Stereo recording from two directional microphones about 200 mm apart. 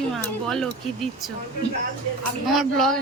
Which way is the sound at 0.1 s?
Centre (ahead or behind).